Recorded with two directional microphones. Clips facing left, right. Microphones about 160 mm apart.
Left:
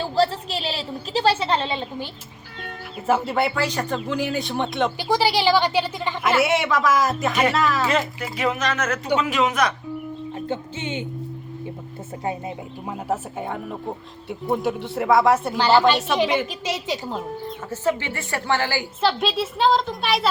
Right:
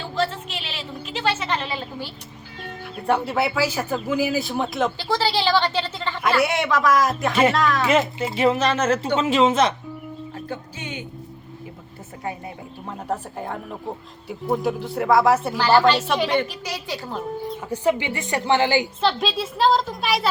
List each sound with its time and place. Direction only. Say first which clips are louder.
0.0 s a sound: left 4 dB; 35° left (ahead or behind)
3.1 s speech: left 1 dB; centre (ahead or behind)
4.9 s a woman's voice: left 2 dB; 15° left (ahead or behind)
6.4 s speech: left 1 dB; centre (ahead or behind)
7.9 s speech: right 3 dB; 25° right (ahead or behind)
10.3 s music: left 6 dB; 25° left (ahead or behind)
12.8 s speech: left 1 dB; 10° left (ahead or behind)
15.5 s a woman's voice: even; 15° left (ahead or behind)
16.2 s speech: even; centre (ahead or behind)
16.5 s a woman's voice: left 4 dB; 20° left (ahead or behind)
17.4 s speech: right 3 dB; 15° right (ahead or behind)
19.0 s speech: left 1 dB; centre (ahead or behind)